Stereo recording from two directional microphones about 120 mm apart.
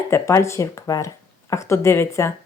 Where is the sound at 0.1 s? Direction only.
25° left (ahead or behind).